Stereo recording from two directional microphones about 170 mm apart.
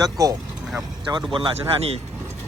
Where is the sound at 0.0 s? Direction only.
20° right (ahead or behind); by 2.0 s 35° right (ahead or behind).